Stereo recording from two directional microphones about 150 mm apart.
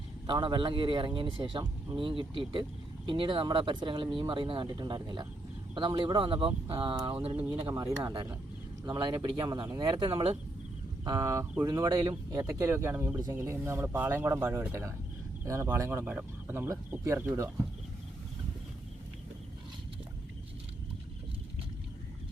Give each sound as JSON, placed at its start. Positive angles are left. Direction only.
{"t": 0.3, "sound": "speech", "side_deg": -35}
{"t": 7.5, "sound": "speech", "side_deg": -30}